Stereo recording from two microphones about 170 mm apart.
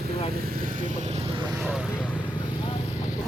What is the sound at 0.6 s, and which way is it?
Speech, 50° right (ahead or behind).